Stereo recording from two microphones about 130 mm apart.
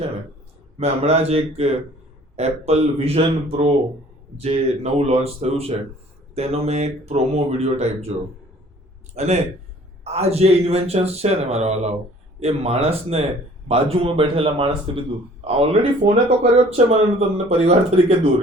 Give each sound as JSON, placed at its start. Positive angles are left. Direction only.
{"t": 0.8, "sound": "speech", "side_deg": -55}
{"t": 9.1, "sound": "speech", "side_deg": -55}